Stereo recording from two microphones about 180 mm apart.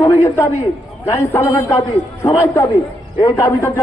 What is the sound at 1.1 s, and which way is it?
A man's voice, 15° left (ahead or behind).